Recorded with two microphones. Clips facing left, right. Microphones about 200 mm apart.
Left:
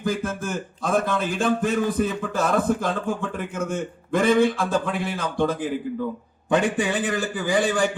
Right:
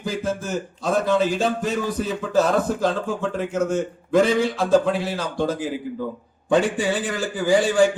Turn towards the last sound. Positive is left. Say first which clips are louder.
# right 3 dB
turn(degrees=55)  # may be behind; listen again after turning